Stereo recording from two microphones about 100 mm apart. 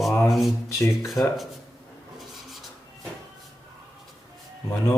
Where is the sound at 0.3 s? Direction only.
Centre (ahead or behind).